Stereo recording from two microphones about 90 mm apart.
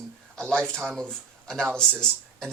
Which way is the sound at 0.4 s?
10° left (ahead or behind).